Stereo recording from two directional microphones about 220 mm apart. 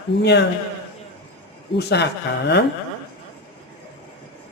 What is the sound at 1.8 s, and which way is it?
Speech, 50° left (ahead or behind).